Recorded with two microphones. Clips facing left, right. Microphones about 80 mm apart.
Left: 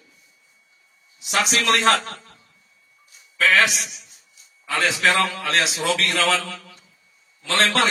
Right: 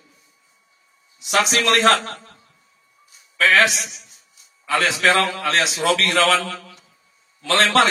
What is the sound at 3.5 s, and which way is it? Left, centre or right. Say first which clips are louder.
Speech: right 3 dB; right.